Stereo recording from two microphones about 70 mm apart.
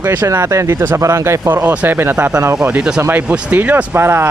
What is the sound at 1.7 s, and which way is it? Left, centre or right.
Speech, right.